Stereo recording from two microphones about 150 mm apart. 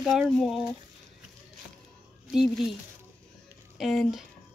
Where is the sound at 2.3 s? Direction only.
Centre (ahead or behind).